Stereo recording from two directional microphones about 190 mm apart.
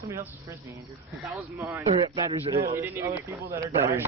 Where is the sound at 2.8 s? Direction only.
15° right (ahead or behind).